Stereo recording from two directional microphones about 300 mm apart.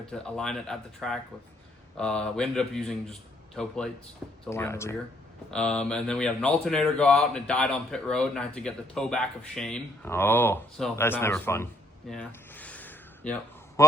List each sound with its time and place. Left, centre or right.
0.1 s speech: centre
12.1 s a sound: centre
13.8 s a man's voice: centre